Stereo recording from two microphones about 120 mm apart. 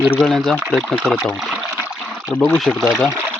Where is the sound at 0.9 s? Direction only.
5° left (ahead or behind).